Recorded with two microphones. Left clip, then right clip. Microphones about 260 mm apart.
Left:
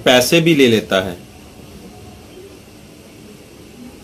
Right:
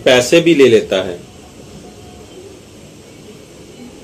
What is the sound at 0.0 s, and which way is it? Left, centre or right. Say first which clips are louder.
Speech: right 2 dB; left.